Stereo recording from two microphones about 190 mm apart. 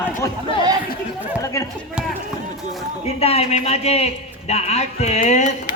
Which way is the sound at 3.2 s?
35° left (ahead or behind).